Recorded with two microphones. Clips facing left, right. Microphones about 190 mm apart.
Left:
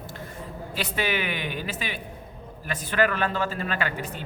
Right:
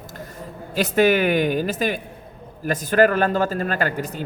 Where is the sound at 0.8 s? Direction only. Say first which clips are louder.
Right 11 dB; 45° right (ahead or behind).